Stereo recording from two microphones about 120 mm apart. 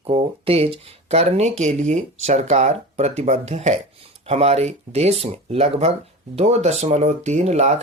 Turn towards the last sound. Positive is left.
turn(degrees=-65)  # may be behind; listen again after turning